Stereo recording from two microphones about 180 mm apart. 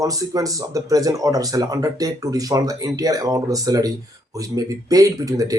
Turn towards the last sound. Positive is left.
turn(degrees=-20)  # may be behind; listen again after turning